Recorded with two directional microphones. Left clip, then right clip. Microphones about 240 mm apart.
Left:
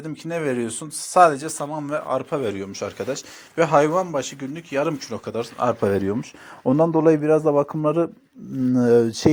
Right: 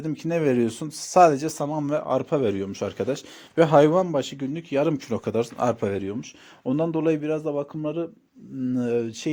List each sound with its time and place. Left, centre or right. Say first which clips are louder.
0.0 s speech: right 2 dB; right
5.8 s a man's voice: left 6 dB; centre